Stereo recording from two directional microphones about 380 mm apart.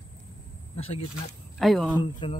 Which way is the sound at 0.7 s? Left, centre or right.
Centre.